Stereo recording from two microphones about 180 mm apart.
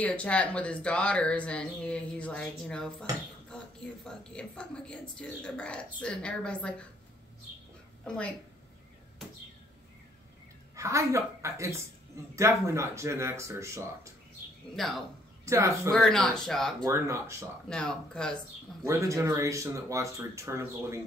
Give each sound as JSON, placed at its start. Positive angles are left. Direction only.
{"t": 0.0, "sound": "speech", "side_deg": 5}
{"t": 8.0, "sound": "a woman's voice", "side_deg": 5}
{"t": 10.8, "sound": "speech", "side_deg": -15}
{"t": 14.8, "sound": "speech", "side_deg": 0}
{"t": 15.4, "sound": "speech", "side_deg": -15}
{"t": 15.9, "sound": "speech", "side_deg": 5}
{"t": 16.8, "sound": "speech", "side_deg": -15}
{"t": 17.6, "sound": "speech", "side_deg": 5}
{"t": 18.9, "sound": "speech", "side_deg": -15}